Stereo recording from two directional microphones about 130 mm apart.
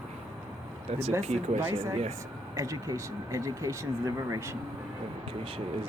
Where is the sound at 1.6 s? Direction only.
20° right (ahead or behind).